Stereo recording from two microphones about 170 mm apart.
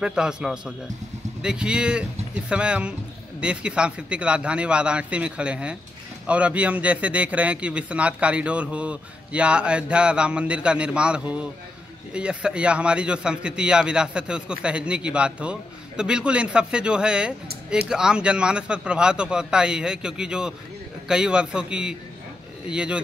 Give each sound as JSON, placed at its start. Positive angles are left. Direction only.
{"t": 0.0, "sound": "a man's voice", "side_deg": -5}